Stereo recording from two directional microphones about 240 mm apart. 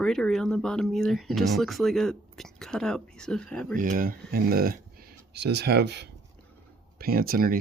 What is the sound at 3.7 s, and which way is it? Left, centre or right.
Speech, right.